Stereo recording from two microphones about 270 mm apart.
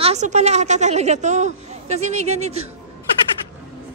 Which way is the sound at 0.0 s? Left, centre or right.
Right.